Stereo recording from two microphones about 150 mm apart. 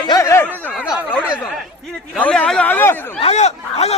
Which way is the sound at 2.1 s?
10° left (ahead or behind).